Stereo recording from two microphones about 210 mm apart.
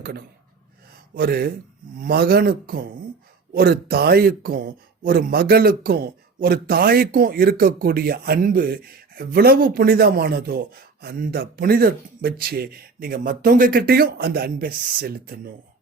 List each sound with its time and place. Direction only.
1.1 s speech: 45° right (ahead or behind)